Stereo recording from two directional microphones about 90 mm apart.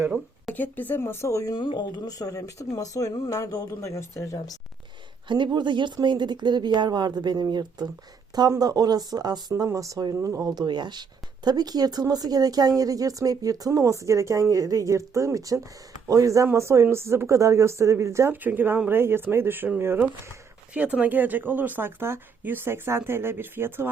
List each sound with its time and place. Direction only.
0.5 s speech: 20° left (ahead or behind); by 1.5 s 35° left (ahead or behind)
1.5 s speech: 55° left (ahead or behind); by 4.5 s 35° left (ahead or behind)
5.3 s speech: 55° right (ahead or behind)
9.6 s speech: 35° right (ahead or behind)
10.5 s speech: 55° right (ahead or behind); by 18.3 s 35° right (ahead or behind)
18.3 s speech: 20° right (ahead or behind)
20.7 s speech: 15° right (ahead or behind)